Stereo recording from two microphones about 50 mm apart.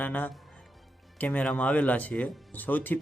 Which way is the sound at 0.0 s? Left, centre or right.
Left.